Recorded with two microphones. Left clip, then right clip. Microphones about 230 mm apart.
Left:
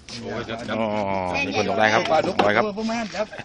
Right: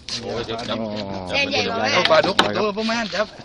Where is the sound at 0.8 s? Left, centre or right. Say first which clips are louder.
Left 5 dB; centre.